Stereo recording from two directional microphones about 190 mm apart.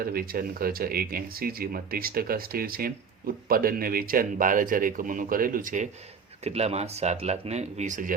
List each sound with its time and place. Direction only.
0.0 s speech: 50° right (ahead or behind)